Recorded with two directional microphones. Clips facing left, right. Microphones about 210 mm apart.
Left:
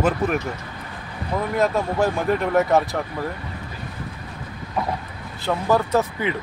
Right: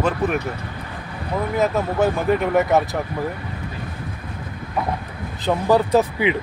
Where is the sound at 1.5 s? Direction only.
Centre (ahead or behind).